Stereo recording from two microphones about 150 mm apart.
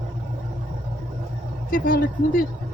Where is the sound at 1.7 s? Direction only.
70° left (ahead or behind).